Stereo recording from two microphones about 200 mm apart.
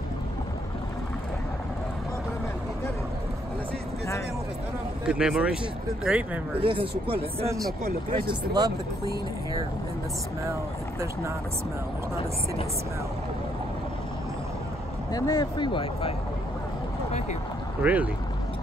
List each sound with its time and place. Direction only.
5.0 s speech: 5° right (ahead or behind)
6.6 s speech: 25° right (ahead or behind)
10.4 s speech: 15° right (ahead or behind)
15.1 s speech: 20° left (ahead or behind)
17.8 s speech: 5° right (ahead or behind)